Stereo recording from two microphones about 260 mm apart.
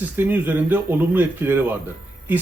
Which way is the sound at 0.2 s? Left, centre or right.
Centre.